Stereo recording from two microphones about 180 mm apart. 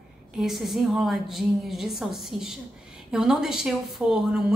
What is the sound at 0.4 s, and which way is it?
A woman's voice, centre (ahead or behind).